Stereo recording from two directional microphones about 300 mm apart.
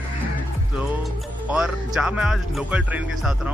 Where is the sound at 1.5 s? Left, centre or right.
Centre.